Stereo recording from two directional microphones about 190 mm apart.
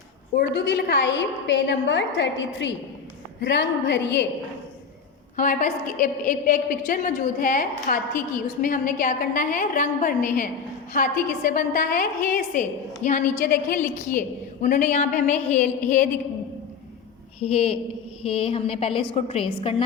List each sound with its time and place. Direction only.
0.3 s a woman's voice: 65° left (ahead or behind)
5.4 s a woman's voice: 45° left (ahead or behind)
17.4 s a woman's voice: 30° left (ahead or behind)